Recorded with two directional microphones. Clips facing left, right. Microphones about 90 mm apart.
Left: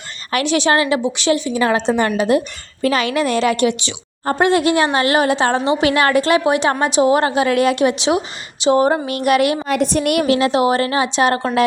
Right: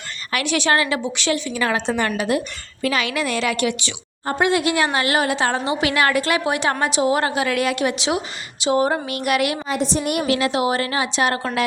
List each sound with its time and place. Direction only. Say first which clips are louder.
0.3 s a woman's voice: left 4 dB; 30° left (ahead or behind)
4.3 s a woman's voice: left 4 dB; 40° left (ahead or behind)
9.6 s a woman's voice: left 5 dB; 60° left (ahead or behind); by 10.2 s 75° left (ahead or behind)
10.2 s a woman's voice: left 5 dB; 30° left (ahead or behind)